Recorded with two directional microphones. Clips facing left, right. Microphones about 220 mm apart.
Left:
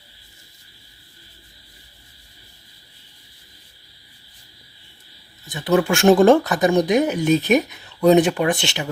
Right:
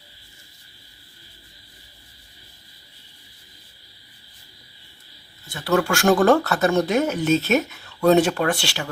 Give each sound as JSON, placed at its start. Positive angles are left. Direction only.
{"t": 5.5, "sound": "speech", "side_deg": 20}